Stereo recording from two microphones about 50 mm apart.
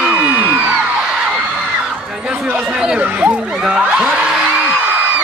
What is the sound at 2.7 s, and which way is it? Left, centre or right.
Chatter, centre.